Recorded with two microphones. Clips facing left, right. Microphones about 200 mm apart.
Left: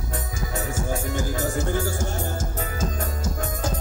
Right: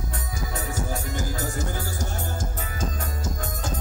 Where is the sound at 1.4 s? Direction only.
45° left (ahead or behind).